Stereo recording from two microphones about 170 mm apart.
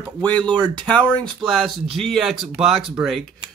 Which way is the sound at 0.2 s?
10° left (ahead or behind).